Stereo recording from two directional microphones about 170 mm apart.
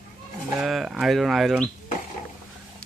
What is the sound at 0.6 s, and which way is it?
Speech, centre (ahead or behind).